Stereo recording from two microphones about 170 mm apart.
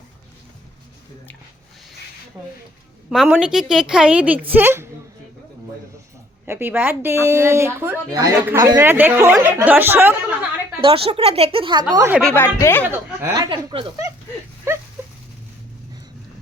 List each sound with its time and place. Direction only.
3.1 s a woman's voice: 5° right (ahead or behind)
6.4 s speech: 10° right (ahead or behind)
10.8 s speech: 30° right (ahead or behind)
12.2 s speech: 10° left (ahead or behind)
12.8 s speech: 15° right (ahead or behind)
14.7 s a sound: 15° right (ahead or behind)